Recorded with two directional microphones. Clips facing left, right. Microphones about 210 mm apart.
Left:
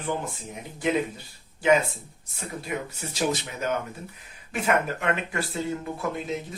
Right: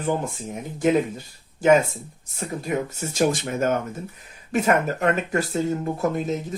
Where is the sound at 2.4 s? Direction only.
45° right (ahead or behind).